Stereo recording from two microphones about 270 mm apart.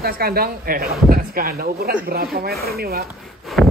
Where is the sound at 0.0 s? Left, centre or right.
Right.